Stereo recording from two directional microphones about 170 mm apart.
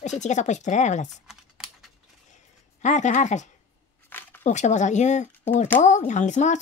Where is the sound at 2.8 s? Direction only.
45° left (ahead or behind).